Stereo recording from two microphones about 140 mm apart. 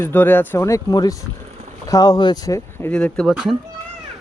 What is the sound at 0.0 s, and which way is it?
Speech, 15° left (ahead or behind).